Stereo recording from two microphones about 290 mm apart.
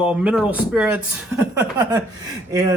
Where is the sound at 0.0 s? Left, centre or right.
Centre.